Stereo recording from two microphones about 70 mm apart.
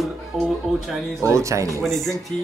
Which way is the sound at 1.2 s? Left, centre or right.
Right.